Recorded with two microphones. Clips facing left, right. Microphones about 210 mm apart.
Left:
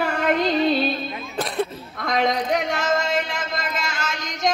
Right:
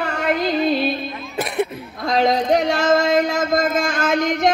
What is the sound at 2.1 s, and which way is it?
Speech, 35° right (ahead or behind).